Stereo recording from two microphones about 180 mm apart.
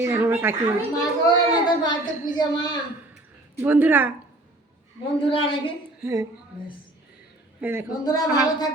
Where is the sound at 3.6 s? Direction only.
10° right (ahead or behind).